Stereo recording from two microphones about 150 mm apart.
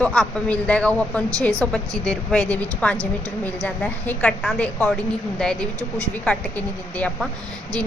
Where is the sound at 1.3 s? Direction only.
20° right (ahead or behind).